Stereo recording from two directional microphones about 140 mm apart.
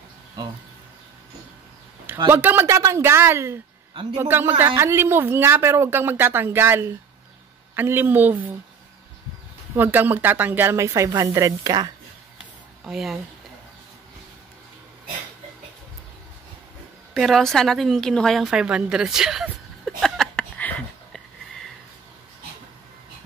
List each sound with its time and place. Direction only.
2.3 s speech: 15° right (ahead or behind)
3.9 s a man's voice: 35° right (ahead or behind)
4.2 s speech: 15° right (ahead or behind)
9.8 s speech: 15° right (ahead or behind)
12.8 s speech: 5° right (ahead or behind)
17.1 s speech: centre (ahead or behind)